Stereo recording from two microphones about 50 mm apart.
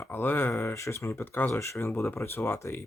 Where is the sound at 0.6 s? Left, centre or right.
Left.